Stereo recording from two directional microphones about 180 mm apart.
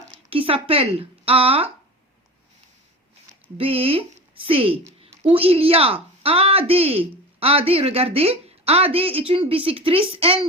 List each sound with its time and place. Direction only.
0.1 s speech: 30° right (ahead or behind)
3.6 s a woman's voice: 30° right (ahead or behind)